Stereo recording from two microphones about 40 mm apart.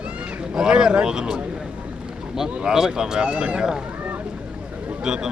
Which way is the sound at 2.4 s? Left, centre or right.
Right.